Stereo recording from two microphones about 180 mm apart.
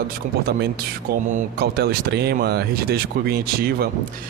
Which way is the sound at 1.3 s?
60° right (ahead or behind).